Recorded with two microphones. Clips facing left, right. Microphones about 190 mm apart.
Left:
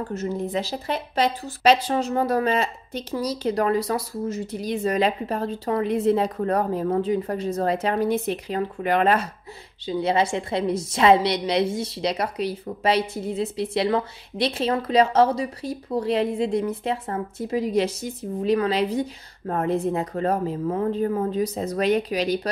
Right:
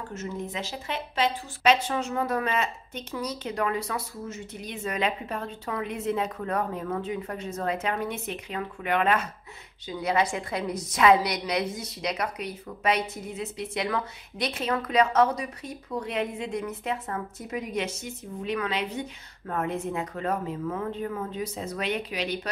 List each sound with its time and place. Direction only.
0.1 s a woman's voice: 35° left (ahead or behind)